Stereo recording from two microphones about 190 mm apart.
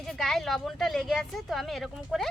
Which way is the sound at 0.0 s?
Centre (ahead or behind).